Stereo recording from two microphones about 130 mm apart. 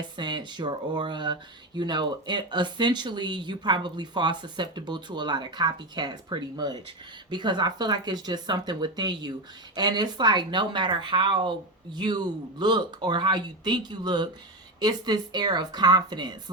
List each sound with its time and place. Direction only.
0.2 s speech: 35° right (ahead or behind)